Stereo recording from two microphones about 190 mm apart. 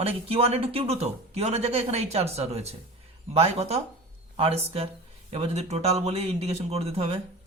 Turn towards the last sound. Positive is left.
turn(degrees=-30)  # may be behind; listen again after turning